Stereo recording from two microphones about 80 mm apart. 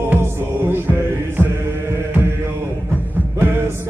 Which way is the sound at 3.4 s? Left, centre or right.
Right.